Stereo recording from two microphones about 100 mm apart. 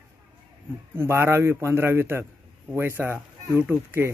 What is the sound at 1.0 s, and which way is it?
A man's voice, 25° right (ahead or behind).